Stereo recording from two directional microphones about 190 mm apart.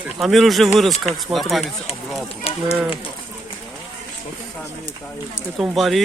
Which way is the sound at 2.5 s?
30° left (ahead or behind).